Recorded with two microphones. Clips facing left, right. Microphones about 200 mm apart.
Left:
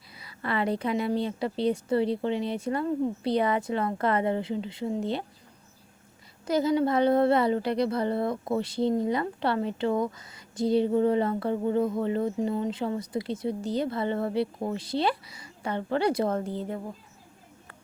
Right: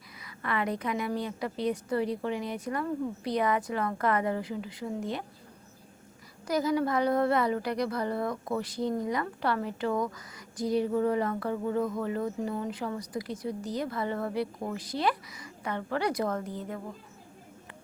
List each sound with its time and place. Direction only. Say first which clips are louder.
0.2 s a woman's voice: left 3 dB; 30° left (ahead or behind)
6.5 s a woman's voice: left 3 dB; 25° left (ahead or behind)